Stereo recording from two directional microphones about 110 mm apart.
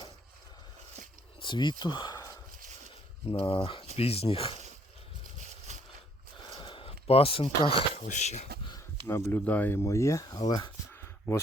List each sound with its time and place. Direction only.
1.4 s speech: 45° left (ahead or behind)
3.3 s speech: 55° left (ahead or behind)
5.7 s a sound: 90° right
6.5 s speech: 50° left (ahead or behind); by 8.4 s 90° left
9.0 s speech: 20° left (ahead or behind)